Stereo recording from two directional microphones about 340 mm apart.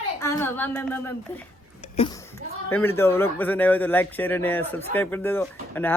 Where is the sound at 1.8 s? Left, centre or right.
Centre.